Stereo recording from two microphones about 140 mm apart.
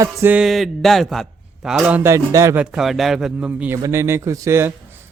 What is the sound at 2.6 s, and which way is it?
Speech, 5° right (ahead or behind).